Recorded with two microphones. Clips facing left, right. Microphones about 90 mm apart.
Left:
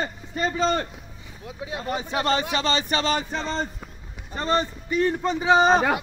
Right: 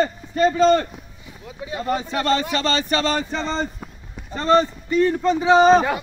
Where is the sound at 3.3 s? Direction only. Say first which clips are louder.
Right 3 dB; 5° left (ahead or behind).